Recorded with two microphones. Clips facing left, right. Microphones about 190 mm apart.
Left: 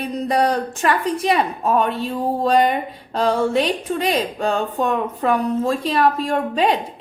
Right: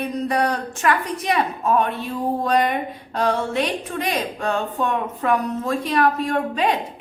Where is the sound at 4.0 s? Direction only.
30° left (ahead or behind).